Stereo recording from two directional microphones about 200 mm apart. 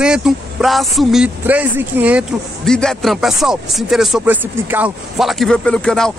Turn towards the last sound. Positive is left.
turn(degrees=5)  # may be behind; listen again after turning